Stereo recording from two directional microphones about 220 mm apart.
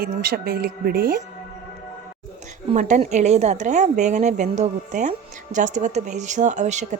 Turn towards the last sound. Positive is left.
turn(degrees=-30)  # may be behind; listen again after turning